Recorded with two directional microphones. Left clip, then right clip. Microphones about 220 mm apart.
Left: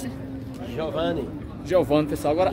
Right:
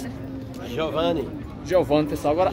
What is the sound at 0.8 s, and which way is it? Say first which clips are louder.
Speech: right 3 dB; 35° right (ahead or behind).